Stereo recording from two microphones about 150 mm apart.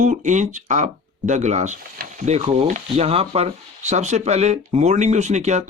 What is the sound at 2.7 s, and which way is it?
Speech, 50° right (ahead or behind).